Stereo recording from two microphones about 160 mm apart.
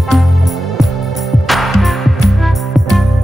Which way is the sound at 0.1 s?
Centre (ahead or behind).